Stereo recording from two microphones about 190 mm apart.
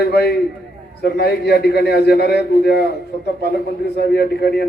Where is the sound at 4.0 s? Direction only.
55° left (ahead or behind).